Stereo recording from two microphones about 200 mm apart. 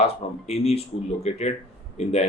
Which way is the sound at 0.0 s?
30° left (ahead or behind).